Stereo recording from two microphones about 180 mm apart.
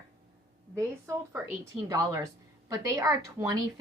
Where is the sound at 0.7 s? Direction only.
15° right (ahead or behind).